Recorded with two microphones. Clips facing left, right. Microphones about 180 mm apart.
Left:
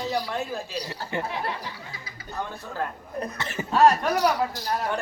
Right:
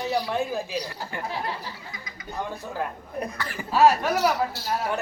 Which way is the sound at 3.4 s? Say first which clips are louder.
Left 2 dB; 25° left (ahead or behind).